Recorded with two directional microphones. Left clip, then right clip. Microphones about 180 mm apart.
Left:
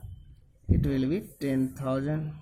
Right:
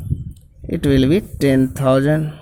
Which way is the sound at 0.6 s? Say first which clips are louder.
Right 13 dB; 45° right (ahead or behind).